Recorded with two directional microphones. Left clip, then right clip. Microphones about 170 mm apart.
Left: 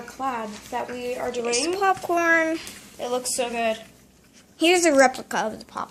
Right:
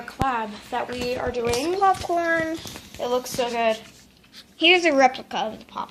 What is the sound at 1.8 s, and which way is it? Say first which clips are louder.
Speech: right 2 dB; 20° left (ahead or behind).